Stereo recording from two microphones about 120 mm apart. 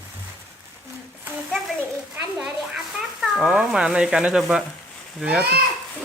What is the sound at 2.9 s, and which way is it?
A child's voice, 5° right (ahead or behind).